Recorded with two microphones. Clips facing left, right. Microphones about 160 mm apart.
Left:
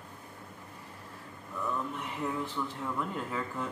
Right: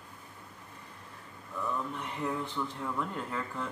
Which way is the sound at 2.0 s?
Centre (ahead or behind).